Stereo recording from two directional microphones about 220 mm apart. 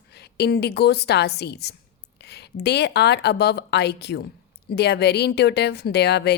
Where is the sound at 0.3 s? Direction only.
50° left (ahead or behind).